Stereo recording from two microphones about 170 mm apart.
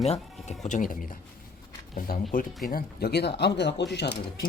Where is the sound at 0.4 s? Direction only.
45° left (ahead or behind).